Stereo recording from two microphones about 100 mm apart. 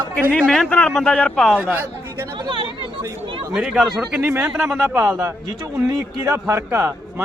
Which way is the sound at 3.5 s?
5° right (ahead or behind).